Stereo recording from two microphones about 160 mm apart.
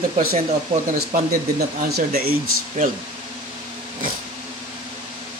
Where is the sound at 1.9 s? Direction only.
70° right (ahead or behind).